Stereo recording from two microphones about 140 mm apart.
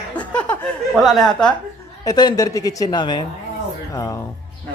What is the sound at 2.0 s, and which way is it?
Speech, 30° left (ahead or behind).